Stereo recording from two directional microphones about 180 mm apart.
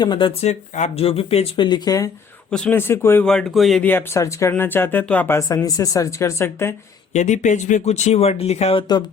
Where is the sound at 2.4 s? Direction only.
5° left (ahead or behind).